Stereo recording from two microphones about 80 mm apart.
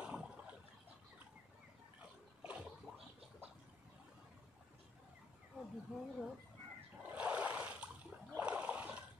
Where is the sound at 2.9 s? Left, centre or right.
Centre.